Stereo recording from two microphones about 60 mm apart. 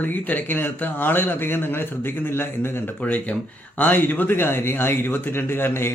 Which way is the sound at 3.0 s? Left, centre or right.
Left.